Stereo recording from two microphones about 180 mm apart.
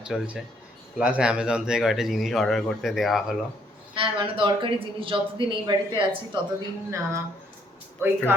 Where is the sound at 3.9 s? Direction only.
30° right (ahead or behind).